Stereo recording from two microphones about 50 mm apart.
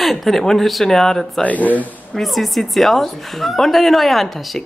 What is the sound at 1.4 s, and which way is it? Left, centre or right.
Speech, left.